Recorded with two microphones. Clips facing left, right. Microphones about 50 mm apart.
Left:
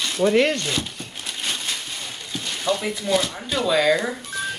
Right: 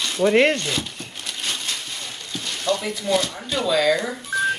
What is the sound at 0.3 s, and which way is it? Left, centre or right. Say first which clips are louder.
Speech: right 2 dB; right.